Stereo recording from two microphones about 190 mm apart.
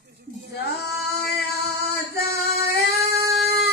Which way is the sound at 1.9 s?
55° left (ahead or behind).